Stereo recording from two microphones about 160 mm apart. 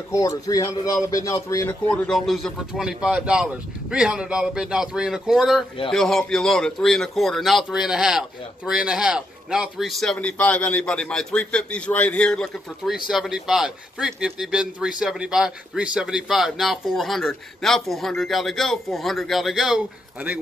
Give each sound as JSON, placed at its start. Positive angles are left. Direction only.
{"t": 0.1, "sound": "a man's voice", "side_deg": 20}
{"t": 1.7, "sound": "a man's voice", "side_deg": 5}